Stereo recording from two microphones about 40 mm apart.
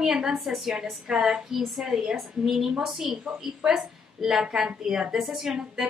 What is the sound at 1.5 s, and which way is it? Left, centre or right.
Speech, centre.